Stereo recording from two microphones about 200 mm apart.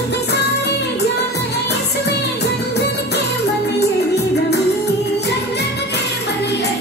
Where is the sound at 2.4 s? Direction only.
55° left (ahead or behind).